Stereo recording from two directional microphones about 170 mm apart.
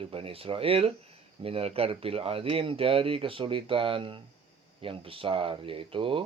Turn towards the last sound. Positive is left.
turn(degrees=-30)  # may be behind; listen again after turning